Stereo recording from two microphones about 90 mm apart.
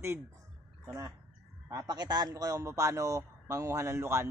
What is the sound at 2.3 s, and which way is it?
A man's voice, 40° right (ahead or behind).